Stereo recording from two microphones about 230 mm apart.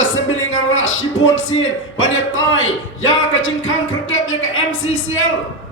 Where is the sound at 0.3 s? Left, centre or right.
Left.